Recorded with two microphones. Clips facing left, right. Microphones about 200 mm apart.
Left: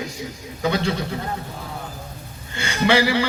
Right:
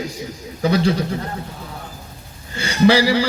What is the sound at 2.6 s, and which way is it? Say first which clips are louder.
Speech: right 4 dB; 35° right (ahead or behind).